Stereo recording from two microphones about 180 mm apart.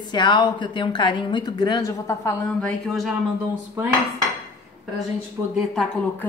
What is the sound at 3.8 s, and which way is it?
Cutlery, 15° right (ahead or behind).